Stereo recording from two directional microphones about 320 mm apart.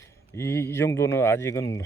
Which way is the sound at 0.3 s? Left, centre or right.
Centre.